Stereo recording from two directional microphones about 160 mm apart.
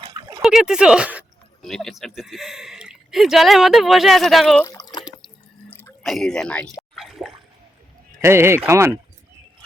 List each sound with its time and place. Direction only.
0.1 s a sound: 25° right (ahead or behind)
0.4 s speech: 5° right (ahead or behind)
4.6 s water: 20° left (ahead or behind)
6.0 s speech: centre (ahead or behind)
6.9 s water: centre (ahead or behind)
8.2 s speech: 15° right (ahead or behind)